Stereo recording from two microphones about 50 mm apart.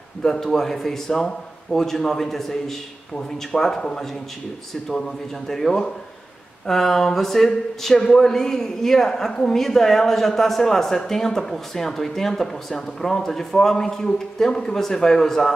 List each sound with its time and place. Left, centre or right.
0.2 s speech: centre